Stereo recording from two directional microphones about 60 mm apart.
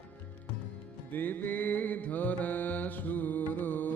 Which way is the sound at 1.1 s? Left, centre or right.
Left.